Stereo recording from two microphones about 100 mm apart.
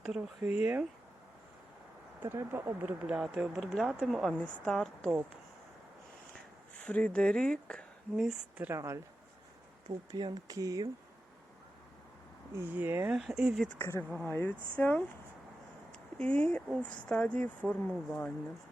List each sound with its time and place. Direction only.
0.4 s speech: 15° right (ahead or behind)
2.2 s speech: 25° right (ahead or behind)
2.8 s speech: 5° right (ahead or behind)
6.7 s speech: 10° left (ahead or behind)
8.1 s speech: 5° right (ahead or behind)
8.7 s speech: 30° right (ahead or behind)
10.1 s speech: 45° right (ahead or behind)
12.5 s speech: 20° right (ahead or behind)
13.1 s speech: 5° right (ahead or behind)
13.7 s speech: 30° left (ahead or behind)
16.1 s speech: 10° left (ahead or behind)